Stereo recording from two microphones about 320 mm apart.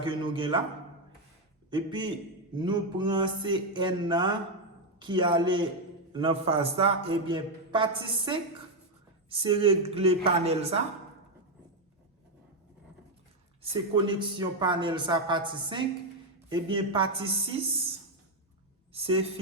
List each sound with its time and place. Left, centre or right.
0.0 s a man's voice: centre
1.7 s a man's voice: centre
13.6 s a man's voice: centre
18.9 s a woman's voice: centre